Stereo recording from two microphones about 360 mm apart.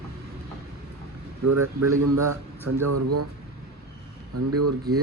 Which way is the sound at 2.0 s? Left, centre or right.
Right.